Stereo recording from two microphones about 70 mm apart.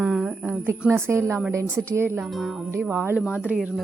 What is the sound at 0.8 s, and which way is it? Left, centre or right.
Speech, right.